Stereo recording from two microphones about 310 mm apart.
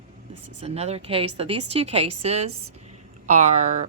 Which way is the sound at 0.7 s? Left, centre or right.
Centre.